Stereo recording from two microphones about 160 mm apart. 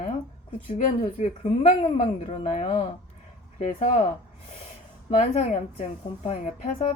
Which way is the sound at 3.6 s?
50° left (ahead or behind).